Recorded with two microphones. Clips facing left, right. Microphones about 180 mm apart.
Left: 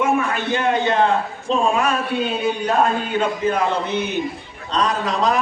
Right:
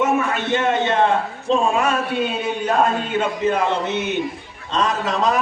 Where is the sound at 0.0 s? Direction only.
20° right (ahead or behind).